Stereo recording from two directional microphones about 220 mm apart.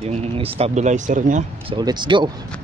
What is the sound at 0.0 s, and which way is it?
Speech, 30° right (ahead or behind).